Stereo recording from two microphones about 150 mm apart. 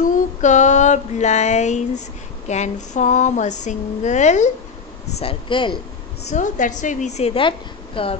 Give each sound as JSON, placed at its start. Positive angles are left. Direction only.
{"t": 0.0, "sound": "female singing", "side_deg": 55}
{"t": 5.2, "sound": "speech", "side_deg": 35}
{"t": 6.3, "sound": "a woman's voice", "side_deg": 55}